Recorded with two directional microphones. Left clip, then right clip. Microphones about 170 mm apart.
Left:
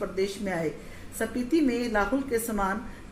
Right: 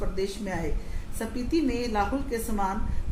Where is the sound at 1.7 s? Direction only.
25° left (ahead or behind).